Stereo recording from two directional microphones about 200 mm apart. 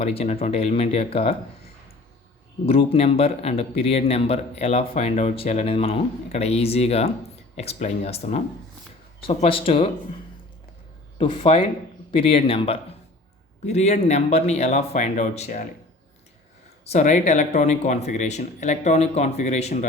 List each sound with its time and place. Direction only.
0.0 s speech: 30° left (ahead or behind)
2.6 s speech: 30° left (ahead or behind)
11.2 s speech: 30° left (ahead or behind)
16.8 s speech: 35° left (ahead or behind)